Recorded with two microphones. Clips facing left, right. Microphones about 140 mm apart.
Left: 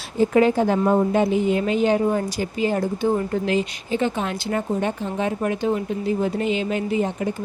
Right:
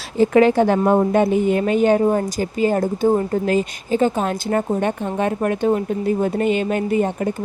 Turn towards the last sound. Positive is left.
turn(degrees=-50)  # may be behind; listen again after turning